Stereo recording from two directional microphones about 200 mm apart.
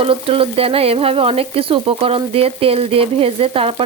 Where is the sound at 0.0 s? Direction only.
30° right (ahead or behind).